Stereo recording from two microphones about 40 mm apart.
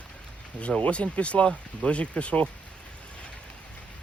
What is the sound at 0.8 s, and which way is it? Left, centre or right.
Speech, left.